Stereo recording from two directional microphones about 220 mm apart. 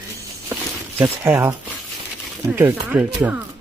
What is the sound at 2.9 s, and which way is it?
Speech, 10° right (ahead or behind).